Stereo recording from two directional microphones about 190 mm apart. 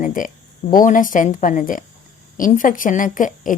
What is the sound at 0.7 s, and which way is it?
Speech, 45° left (ahead or behind).